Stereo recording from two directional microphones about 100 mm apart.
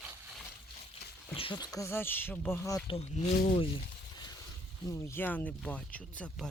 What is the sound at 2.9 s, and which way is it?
Speech, 75° left (ahead or behind).